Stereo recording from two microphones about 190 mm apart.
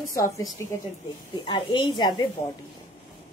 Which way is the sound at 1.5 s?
25° left (ahead or behind).